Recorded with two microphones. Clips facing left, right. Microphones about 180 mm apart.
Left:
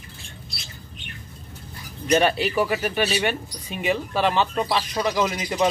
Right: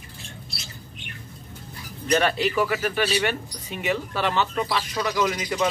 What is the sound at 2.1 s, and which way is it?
A man's voice, 15° left (ahead or behind).